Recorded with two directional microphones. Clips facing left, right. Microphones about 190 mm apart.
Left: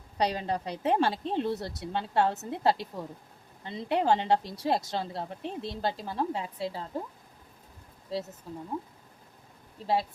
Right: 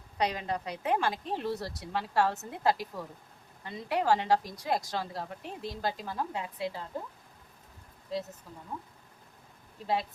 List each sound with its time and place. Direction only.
0.2 s a woman's voice: 30° left (ahead or behind)
9.8 s speech: 30° left (ahead or behind)